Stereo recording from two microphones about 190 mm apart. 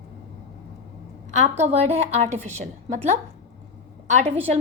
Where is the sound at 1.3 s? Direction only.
35° right (ahead or behind).